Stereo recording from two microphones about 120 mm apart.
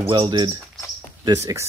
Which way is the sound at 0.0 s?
45° right (ahead or behind).